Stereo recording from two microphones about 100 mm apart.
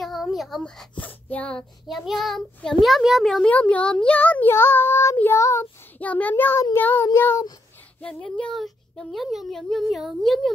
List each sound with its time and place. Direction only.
0.0 s a sound: centre (ahead or behind)
0.6 s speech: 10° left (ahead or behind)
1.9 s a child's voice: centre (ahead or behind)
3.4 s speech: 15° left (ahead or behind)
5.1 s child singing: 20° left (ahead or behind)
5.4 s child singing: 30° left (ahead or behind)
5.9 s speech: 15° left (ahead or behind)
6.8 s child singing: 20° left (ahead or behind)
8.0 s a child's voice: 10° left (ahead or behind)